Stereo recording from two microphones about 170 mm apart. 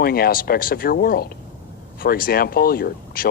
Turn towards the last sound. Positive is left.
turn(degrees=60)  # may be behind; listen again after turning